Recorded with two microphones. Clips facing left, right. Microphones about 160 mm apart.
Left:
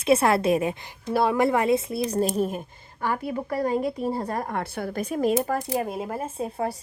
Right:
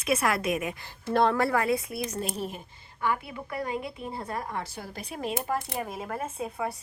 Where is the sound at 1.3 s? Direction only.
20° left (ahead or behind).